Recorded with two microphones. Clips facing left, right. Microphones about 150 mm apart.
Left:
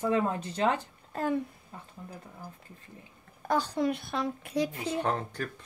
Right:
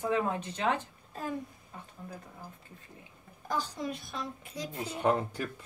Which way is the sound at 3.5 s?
65° left (ahead or behind).